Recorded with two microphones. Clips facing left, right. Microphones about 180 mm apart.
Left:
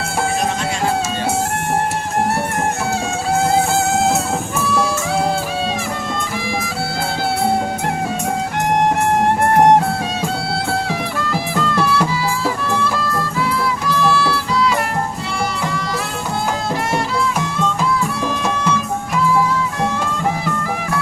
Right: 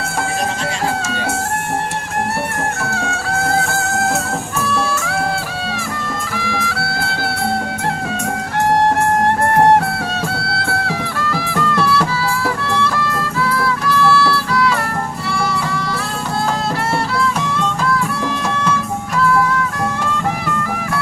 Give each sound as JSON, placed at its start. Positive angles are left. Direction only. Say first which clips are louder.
{"t": 2.9, "sound": "music", "louder": "left 3 dB", "side_deg": 15}
{"t": 6.3, "sound": "music", "louder": "even", "side_deg": 20}
{"t": 9.6, "sound": "music", "louder": "left 1 dB", "side_deg": 15}
{"t": 13.6, "sound": "music", "louder": "right 3 dB", "side_deg": 15}